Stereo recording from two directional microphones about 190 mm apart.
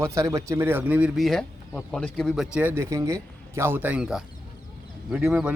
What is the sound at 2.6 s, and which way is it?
Speech, 10° right (ahead or behind).